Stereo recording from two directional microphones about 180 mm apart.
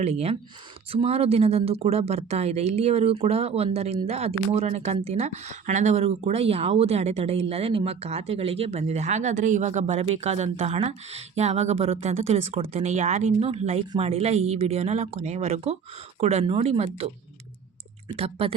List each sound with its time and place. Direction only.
0.0 s speech: 35° right (ahead or behind)
18.2 s speech: 30° right (ahead or behind)